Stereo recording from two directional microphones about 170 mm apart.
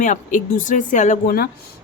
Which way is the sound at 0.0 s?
50° left (ahead or behind).